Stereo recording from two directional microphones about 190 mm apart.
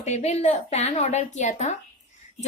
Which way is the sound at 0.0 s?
35° left (ahead or behind).